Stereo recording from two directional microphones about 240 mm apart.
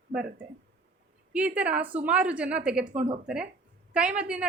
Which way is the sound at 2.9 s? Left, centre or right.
Right.